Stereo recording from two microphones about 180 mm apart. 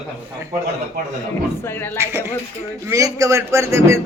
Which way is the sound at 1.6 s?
10° left (ahead or behind).